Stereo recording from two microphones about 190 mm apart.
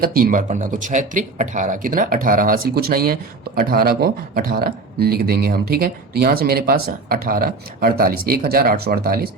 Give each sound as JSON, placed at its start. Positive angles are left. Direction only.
{"t": 0.0, "sound": "speech", "side_deg": -45}